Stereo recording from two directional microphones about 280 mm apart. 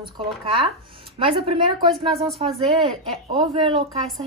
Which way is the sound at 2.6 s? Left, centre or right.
Centre.